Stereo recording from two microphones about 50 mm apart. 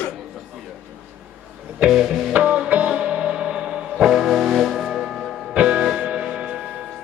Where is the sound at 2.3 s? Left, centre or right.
Right; by 5.3 s centre.